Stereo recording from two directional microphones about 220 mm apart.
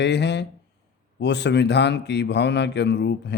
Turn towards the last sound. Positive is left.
turn(degrees=50)  # may be behind; listen again after turning